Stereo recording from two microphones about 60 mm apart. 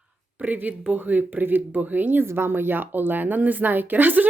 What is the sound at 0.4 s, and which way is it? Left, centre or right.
Speech, right.